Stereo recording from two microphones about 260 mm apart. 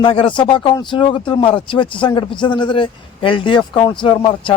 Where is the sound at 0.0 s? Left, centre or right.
Centre.